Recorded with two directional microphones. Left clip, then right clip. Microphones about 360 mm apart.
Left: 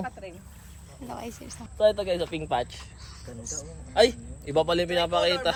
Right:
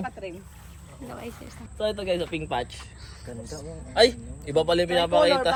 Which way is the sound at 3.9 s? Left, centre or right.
Left.